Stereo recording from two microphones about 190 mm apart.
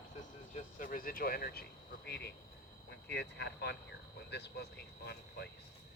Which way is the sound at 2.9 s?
60° left (ahead or behind).